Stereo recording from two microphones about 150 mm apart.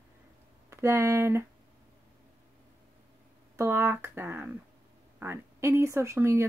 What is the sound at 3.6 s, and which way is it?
Speech, 15° right (ahead or behind).